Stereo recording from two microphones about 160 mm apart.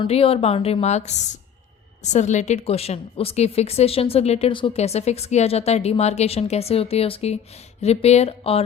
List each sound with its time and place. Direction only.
0.0 s a woman's voice: 35° left (ahead or behind)